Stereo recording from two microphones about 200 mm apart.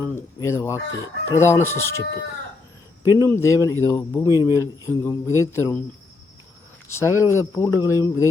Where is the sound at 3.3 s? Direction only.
15° left (ahead or behind).